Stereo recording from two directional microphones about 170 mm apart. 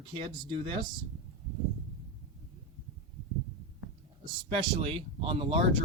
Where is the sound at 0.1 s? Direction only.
30° right (ahead or behind).